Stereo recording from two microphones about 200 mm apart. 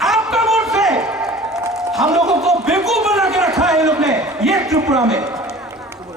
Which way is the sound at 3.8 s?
15° right (ahead or behind).